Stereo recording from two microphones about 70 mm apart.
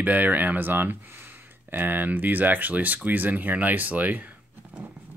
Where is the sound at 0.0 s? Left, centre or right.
Right.